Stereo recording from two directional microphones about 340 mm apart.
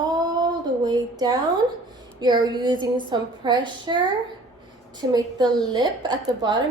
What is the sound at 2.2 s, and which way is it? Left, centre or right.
A woman's voice, centre.